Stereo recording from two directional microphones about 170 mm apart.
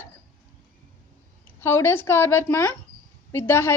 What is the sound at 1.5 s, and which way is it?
A woman's voice, 15° left (ahead or behind).